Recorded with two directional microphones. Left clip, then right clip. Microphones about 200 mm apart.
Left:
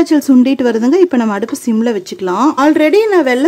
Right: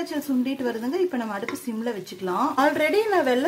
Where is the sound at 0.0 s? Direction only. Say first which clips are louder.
Left 17 dB; 50° left (ahead or behind).